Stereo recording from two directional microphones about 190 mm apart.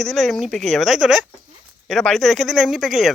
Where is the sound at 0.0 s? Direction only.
Centre (ahead or behind).